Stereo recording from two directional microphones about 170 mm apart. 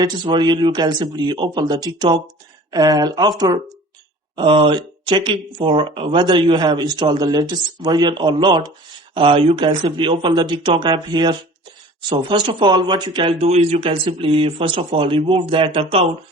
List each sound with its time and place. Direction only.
0.0 s speech: 25° right (ahead or behind)